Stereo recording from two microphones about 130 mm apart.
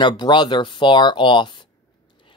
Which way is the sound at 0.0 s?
35° left (ahead or behind).